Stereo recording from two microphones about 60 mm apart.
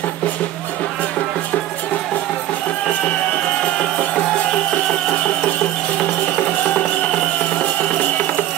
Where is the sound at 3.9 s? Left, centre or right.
Left.